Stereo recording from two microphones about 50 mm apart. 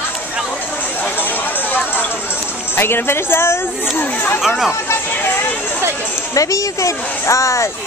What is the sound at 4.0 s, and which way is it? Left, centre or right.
Speech, left.